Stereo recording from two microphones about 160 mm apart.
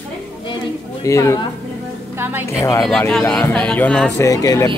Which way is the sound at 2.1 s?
15° right (ahead or behind).